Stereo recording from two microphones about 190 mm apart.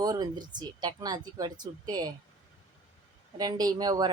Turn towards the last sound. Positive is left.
turn(degrees=-20)  # may be behind; listen again after turning